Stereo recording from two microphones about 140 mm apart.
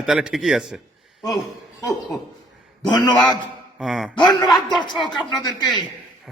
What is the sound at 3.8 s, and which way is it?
Speech, centre (ahead or behind).